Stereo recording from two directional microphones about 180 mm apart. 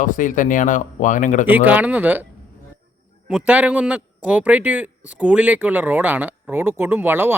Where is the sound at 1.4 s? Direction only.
10° right (ahead or behind).